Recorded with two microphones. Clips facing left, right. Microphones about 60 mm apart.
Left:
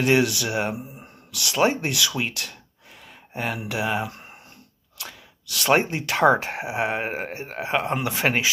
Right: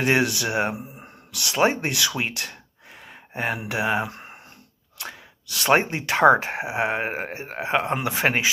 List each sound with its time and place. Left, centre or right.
0.0 s speech: right